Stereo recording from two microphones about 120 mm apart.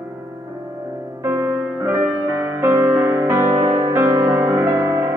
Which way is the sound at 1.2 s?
20° right (ahead or behind).